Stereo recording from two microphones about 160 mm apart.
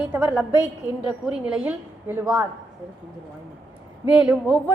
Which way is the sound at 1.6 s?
15° right (ahead or behind).